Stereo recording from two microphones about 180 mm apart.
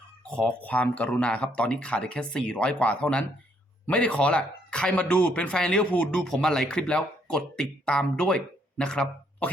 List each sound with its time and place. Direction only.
0.3 s speech: 5° left (ahead or behind)